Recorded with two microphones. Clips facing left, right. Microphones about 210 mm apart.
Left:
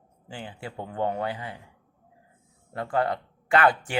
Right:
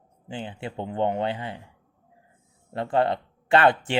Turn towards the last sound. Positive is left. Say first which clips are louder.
# right 2 dB
turn(degrees=-25)  # may be behind; listen again after turning